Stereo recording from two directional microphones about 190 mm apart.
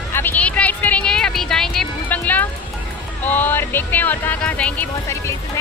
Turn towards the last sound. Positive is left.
turn(degrees=10)  # may be behind; listen again after turning